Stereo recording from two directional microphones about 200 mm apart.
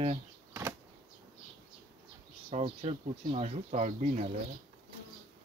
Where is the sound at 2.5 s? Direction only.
30° right (ahead or behind).